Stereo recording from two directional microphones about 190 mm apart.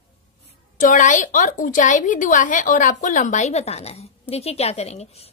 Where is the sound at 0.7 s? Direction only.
40° left (ahead or behind).